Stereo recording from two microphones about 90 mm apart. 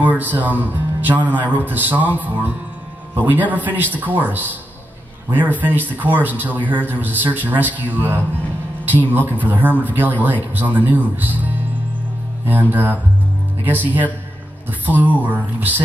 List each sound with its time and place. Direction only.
0.0 s speech: 20° right (ahead or behind)
9.4 s speech: 20° right (ahead or behind)